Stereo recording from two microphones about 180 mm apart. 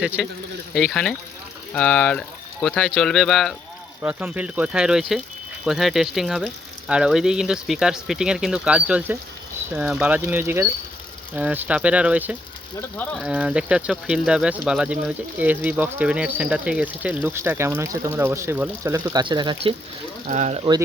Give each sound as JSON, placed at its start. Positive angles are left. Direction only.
{"t": 0.0, "sound": "speech", "side_deg": -5}
{"t": 20.2, "sound": "speech", "side_deg": -40}